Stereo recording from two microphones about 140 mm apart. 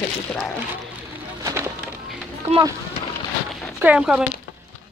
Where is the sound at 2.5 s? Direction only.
50° right (ahead or behind).